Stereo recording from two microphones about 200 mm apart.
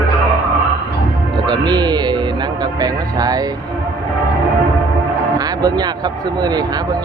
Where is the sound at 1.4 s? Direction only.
20° right (ahead or behind).